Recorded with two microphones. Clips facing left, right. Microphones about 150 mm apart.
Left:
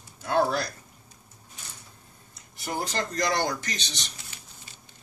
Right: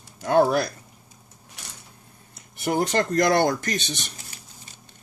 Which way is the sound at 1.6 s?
75° right (ahead or behind).